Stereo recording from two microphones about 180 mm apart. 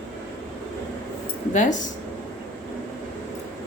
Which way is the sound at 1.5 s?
45° left (ahead or behind).